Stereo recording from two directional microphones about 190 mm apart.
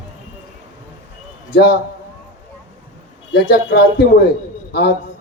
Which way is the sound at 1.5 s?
60° left (ahead or behind).